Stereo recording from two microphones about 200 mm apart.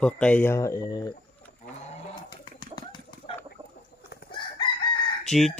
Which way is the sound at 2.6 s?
20° left (ahead or behind).